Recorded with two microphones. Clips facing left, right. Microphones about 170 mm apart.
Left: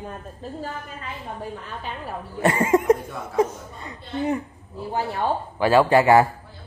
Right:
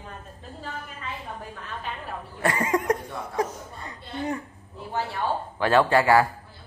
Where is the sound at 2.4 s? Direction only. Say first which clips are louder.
Left 6 dB; 25° left (ahead or behind).